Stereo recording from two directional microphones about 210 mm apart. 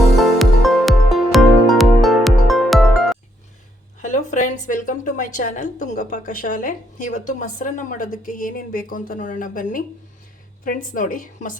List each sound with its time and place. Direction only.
0.0 s music: centre (ahead or behind)
4.0 s a woman's voice: 35° left (ahead or behind)